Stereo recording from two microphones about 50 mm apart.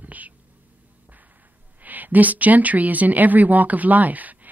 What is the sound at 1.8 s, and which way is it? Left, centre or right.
Speech, right.